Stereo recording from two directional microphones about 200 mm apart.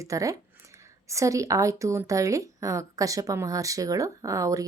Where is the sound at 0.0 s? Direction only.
15° right (ahead or behind).